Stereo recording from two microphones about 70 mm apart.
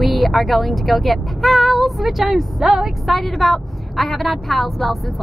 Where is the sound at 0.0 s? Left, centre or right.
Centre.